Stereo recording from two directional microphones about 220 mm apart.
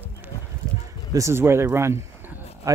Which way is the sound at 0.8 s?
15° right (ahead or behind).